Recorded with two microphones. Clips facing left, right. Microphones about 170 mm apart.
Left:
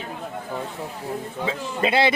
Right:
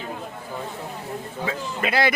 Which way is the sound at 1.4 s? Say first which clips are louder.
Left 3 dB; 25° left (ahead or behind).